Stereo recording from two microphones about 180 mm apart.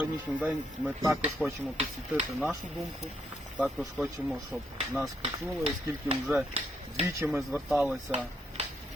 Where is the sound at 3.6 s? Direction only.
5° right (ahead or behind).